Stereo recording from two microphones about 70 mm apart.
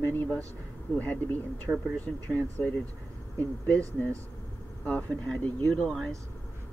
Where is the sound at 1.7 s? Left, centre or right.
Right.